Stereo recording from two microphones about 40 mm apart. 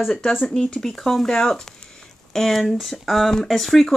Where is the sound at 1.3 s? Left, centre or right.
Centre.